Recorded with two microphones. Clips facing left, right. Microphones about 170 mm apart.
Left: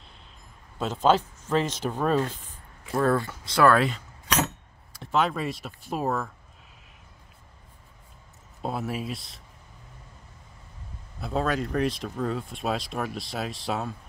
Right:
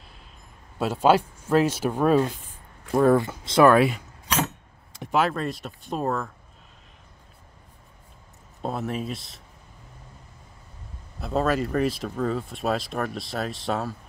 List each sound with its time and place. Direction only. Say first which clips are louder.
0.7 s speech: right 2 dB; 10° right (ahead or behind)
4.9 s a sound: right 6 dB; 25° right (ahead or behind)
5.3 s speech: right 2 dB; centre (ahead or behind)
8.6 s speech: right 2 dB; 5° left (ahead or behind)
11.1 s speech: right 3 dB; centre (ahead or behind)